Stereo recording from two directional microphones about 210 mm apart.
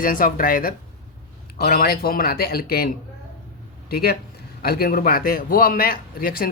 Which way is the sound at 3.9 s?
45° left (ahead or behind).